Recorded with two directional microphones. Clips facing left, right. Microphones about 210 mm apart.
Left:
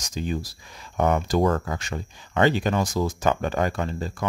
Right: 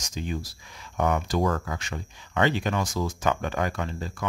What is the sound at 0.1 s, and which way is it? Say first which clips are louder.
Speech: left 4 dB; 35° left (ahead or behind).